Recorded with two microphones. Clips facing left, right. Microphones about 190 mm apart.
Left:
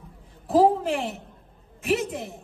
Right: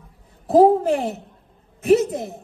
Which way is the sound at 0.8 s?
40° right (ahead or behind).